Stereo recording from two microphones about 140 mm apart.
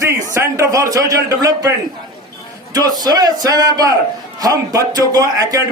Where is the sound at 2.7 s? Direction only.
25° right (ahead or behind).